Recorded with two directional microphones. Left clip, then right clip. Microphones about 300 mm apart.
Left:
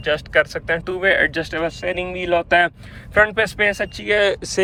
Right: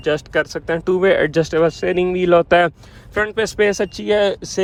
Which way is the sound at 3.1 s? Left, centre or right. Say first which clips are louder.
Left 3 dB; centre.